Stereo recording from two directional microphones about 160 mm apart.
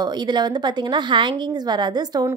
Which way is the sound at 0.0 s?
25° right (ahead or behind).